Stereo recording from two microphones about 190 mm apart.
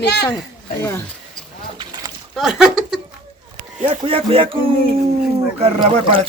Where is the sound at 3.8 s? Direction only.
30° right (ahead or behind).